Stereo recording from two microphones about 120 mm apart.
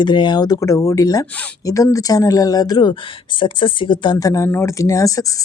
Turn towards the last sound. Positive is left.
turn(degrees=30)  # may be behind; listen again after turning